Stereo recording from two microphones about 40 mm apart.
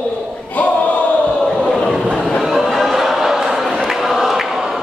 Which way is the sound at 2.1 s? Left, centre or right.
Centre.